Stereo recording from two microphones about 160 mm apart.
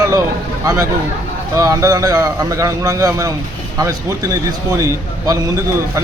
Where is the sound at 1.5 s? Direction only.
20° right (ahead or behind).